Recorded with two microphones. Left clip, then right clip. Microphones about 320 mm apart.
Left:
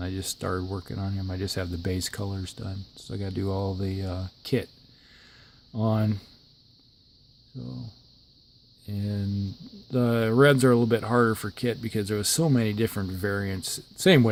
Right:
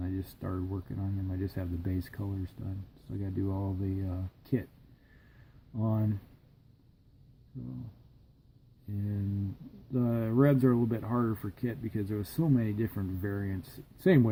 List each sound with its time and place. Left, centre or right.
0.0 s speech: left
5.7 s speech: left
9.9 s speech: left